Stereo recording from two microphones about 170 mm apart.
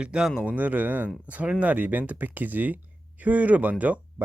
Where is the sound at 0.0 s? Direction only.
5° right (ahead or behind).